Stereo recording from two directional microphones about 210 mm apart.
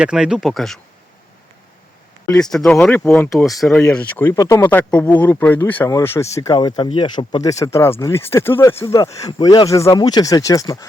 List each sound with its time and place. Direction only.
0.0 s speech: 5° right (ahead or behind)
2.3 s speech: centre (ahead or behind)